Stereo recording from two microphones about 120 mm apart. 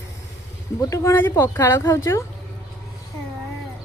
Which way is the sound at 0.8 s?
30° left (ahead or behind).